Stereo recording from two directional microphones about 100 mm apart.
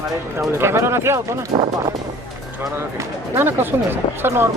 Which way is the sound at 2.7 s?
25° right (ahead or behind).